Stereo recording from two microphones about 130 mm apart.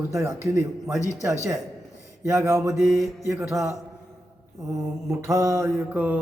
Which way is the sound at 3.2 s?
20° right (ahead or behind).